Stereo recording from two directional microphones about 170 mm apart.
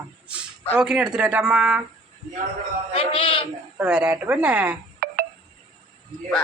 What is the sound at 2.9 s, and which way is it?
Speech, 30° left (ahead or behind).